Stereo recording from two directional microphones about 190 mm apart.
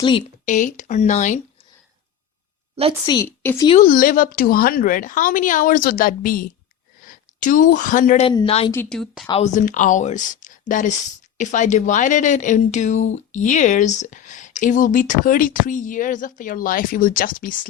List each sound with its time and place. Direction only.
0.0 s a woman's voice: 25° left (ahead or behind)
0.4 s speech: 40° left (ahead or behind)
3.2 s speech: 10° left (ahead or behind)
3.8 s speech: 50° left (ahead or behind)
8.3 s a woman's voice: 25° left (ahead or behind)
8.7 s speech: 5° left (ahead or behind)
9.3 s speech: 40° left (ahead or behind)